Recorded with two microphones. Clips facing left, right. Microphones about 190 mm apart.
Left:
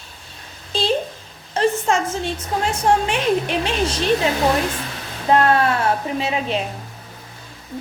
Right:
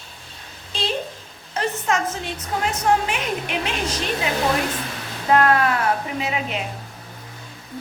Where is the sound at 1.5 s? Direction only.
30° left (ahead or behind).